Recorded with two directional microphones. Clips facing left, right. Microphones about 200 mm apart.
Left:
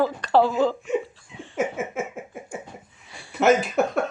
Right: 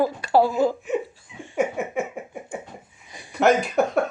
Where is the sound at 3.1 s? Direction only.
15° right (ahead or behind).